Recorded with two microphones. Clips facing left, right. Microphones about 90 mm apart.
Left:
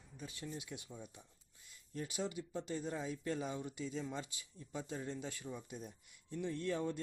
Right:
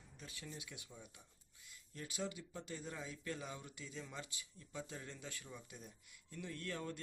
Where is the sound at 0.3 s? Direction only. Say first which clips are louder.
Left 6 dB; 25° left (ahead or behind).